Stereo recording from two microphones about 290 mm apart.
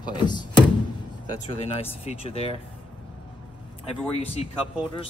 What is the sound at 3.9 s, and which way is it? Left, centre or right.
Speech, left.